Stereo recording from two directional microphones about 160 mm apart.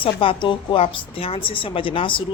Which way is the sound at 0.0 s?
35° left (ahead or behind).